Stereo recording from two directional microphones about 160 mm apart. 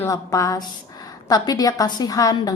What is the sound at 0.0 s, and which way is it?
A woman's voice, 20° left (ahead or behind).